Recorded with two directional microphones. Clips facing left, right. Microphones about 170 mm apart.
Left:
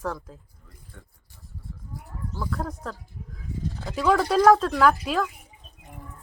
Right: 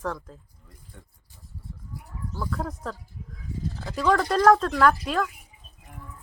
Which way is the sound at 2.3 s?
5° left (ahead or behind).